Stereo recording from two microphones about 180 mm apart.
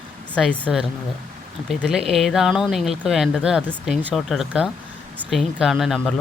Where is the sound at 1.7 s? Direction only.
Centre (ahead or behind).